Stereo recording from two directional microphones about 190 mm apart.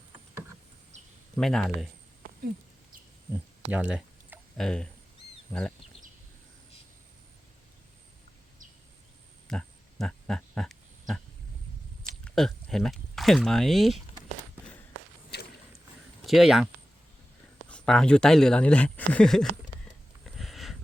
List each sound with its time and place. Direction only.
1.4 s speech: centre (ahead or behind)
3.3 s a sound: 5° right (ahead or behind)
5.5 s speech: 5° left (ahead or behind)
9.5 s a sound: 5° left (ahead or behind)
12.2 s speech: 5° left (ahead or behind)
15.3 s vehicle: 60° left (ahead or behind)
16.2 s speech: centre (ahead or behind)
17.7 s speech: 5° left (ahead or behind)
20.2 s a sound: centre (ahead or behind)